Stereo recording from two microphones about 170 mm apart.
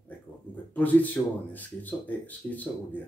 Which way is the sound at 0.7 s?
10° left (ahead or behind).